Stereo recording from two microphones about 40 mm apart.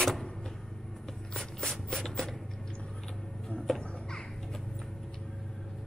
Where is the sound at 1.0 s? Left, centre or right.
Centre.